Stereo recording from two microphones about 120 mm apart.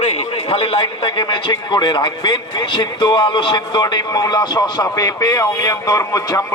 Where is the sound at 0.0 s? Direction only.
55° left (ahead or behind).